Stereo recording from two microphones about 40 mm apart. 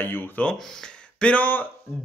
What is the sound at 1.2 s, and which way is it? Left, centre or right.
Speech, left.